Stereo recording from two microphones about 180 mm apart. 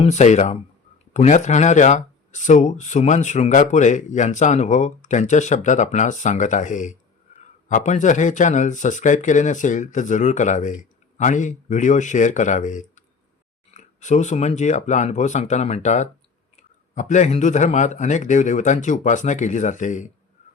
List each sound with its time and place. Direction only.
0.0 s speech: 40° left (ahead or behind)